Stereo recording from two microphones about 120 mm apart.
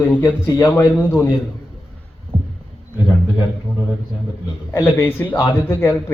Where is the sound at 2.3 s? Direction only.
50° right (ahead or behind).